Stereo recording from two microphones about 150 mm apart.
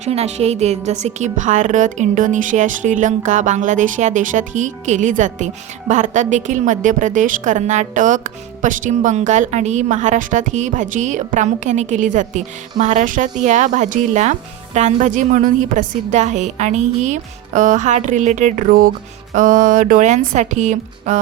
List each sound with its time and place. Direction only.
0.0 s a woman's voice: 45° right (ahead or behind)